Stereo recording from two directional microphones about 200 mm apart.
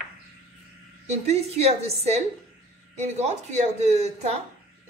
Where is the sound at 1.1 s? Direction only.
30° right (ahead or behind).